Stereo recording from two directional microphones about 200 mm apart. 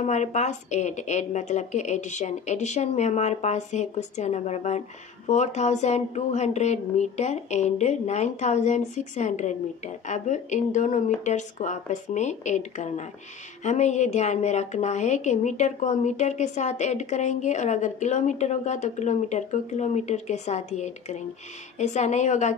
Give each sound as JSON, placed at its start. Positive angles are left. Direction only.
{"t": 0.0, "sound": "a woman's voice", "side_deg": 35}